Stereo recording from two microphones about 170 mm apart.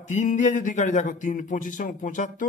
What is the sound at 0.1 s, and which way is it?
Speech, 45° left (ahead or behind).